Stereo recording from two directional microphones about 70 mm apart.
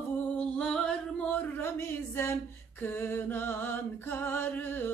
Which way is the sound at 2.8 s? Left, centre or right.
Left.